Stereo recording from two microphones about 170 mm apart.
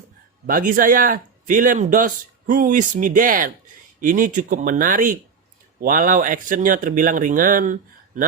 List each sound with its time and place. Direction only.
0.4 s speech: 55° right (ahead or behind)